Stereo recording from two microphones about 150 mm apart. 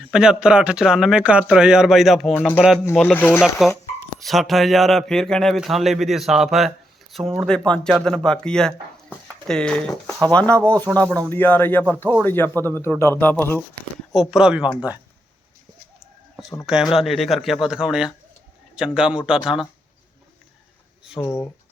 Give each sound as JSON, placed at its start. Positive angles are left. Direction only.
{"t": 0.0, "sound": "speech", "side_deg": -5}
{"t": 4.2, "sound": "speech", "side_deg": 0}
{"t": 14.1, "sound": "speech", "side_deg": 0}
{"t": 16.6, "sound": "speech", "side_deg": -5}
{"t": 21.2, "sound": "speech", "side_deg": 15}